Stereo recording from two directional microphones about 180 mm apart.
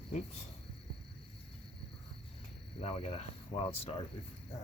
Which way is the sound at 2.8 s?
35° left (ahead or behind).